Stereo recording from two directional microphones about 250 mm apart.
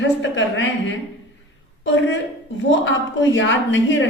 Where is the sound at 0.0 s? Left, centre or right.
Left.